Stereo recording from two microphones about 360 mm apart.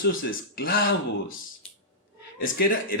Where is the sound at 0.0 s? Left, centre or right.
Left.